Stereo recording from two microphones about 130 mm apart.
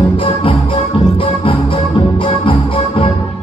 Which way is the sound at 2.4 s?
45° left (ahead or behind).